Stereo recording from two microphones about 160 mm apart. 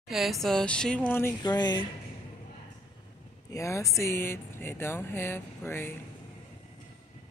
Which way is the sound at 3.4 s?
20° left (ahead or behind).